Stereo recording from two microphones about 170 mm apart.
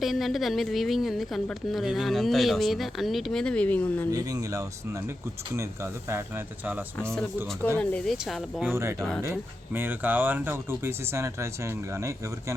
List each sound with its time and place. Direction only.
0.0 s speech: centre (ahead or behind)
4.1 s speech: 20° right (ahead or behind)
7.8 s speech: 5° left (ahead or behind)
8.7 s speech: 15° right (ahead or behind)
9.0 s speech: centre (ahead or behind)
9.2 s speech: 15° right (ahead or behind)